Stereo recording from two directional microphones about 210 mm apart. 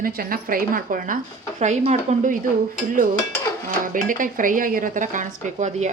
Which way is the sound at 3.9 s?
40° right (ahead or behind).